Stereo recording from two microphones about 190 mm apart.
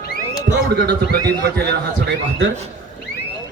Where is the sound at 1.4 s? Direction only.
60° right (ahead or behind).